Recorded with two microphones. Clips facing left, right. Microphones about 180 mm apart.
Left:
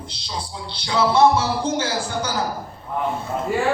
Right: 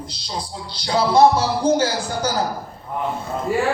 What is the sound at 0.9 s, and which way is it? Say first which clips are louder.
A woman's voice: right 2 dB; 35° right (ahead or behind).